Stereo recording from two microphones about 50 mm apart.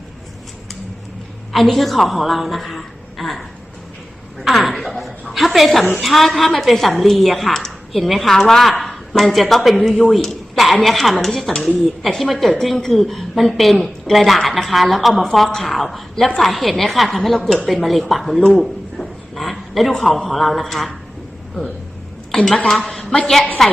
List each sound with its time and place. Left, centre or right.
1.5 s a woman's voice: centre
4.4 s a sound: centre
6.0 s a woman's voice: centre
22.3 s a sound: centre
22.5 s a woman's voice: centre
22.8 s a woman's voice: centre